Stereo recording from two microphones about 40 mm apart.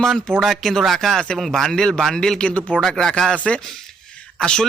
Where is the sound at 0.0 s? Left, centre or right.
Centre.